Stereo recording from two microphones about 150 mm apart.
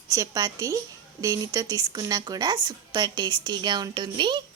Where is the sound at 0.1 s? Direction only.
25° right (ahead or behind).